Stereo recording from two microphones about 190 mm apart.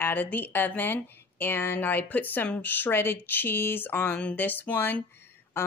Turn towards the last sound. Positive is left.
turn(degrees=10)  # may be behind; listen again after turning